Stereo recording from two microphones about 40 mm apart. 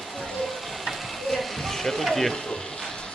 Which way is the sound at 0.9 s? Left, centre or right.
Centre.